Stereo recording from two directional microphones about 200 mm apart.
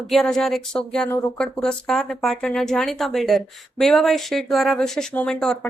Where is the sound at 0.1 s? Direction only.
Centre (ahead or behind).